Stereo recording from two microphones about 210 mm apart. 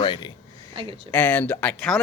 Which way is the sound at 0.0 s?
20° left (ahead or behind).